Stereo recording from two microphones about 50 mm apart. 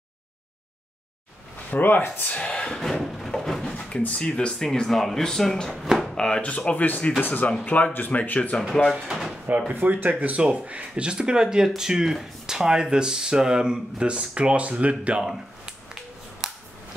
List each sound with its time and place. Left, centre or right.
1.7 s speech: left
2.3 s a sound: left; by 3.7 s centre
3.7 s speech: left
4.7 s speech: centre
5.9 s drawer open or close: centre
6.1 s speech: centre; by 8.5 s left
9.8 s speech: right
15.2 s finger snapping: centre